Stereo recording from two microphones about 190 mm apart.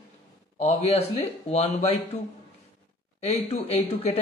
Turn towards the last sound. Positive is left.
turn(degrees=35)  # may be behind; listen again after turning